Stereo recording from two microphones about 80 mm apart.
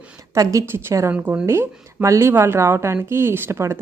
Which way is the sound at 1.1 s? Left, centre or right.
Centre.